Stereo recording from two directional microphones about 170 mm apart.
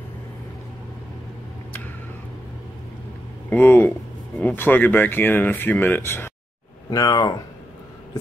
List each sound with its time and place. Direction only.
3.4 s speech: 10° left (ahead or behind)